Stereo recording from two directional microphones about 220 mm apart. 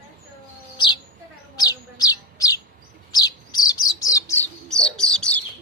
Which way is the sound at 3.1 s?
20° left (ahead or behind).